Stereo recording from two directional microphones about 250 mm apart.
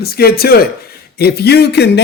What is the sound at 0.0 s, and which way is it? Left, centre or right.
A man's voice, left.